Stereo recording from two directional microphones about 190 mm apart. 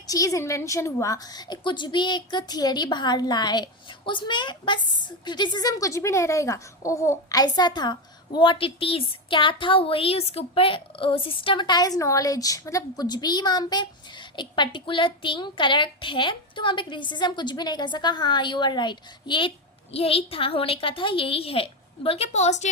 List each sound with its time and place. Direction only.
0.1 s a woman's voice: 15° left (ahead or behind); by 22.7 s 35° left (ahead or behind)